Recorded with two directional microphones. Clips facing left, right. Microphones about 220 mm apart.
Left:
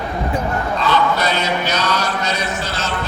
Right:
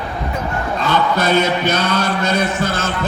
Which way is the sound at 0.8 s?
50° right (ahead or behind).